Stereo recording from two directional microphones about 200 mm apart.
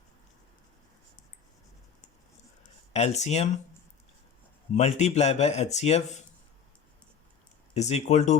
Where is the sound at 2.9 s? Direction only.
35° left (ahead or behind).